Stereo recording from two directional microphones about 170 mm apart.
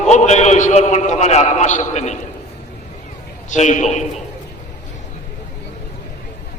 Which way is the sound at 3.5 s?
45° left (ahead or behind).